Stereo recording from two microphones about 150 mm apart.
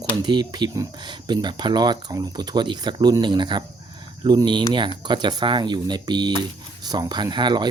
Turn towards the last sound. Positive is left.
turn(degrees=-30)  # may be behind; listen again after turning